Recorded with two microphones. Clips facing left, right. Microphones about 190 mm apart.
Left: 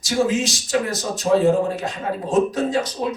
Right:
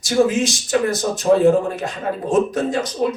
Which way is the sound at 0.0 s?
55° right (ahead or behind).